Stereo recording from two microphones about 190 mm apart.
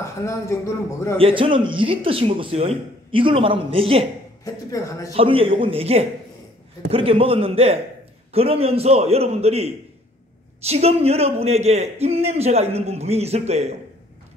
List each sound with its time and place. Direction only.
0.0 s speech: 15° left (ahead or behind)
1.2 s speech: 25° right (ahead or behind)
4.6 s a man's voice: 15° left (ahead or behind)
5.1 s a man's voice: 30° right (ahead or behind)